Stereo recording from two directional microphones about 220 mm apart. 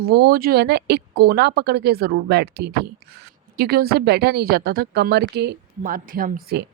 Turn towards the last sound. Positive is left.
turn(degrees=-45)  # may be behind; listen again after turning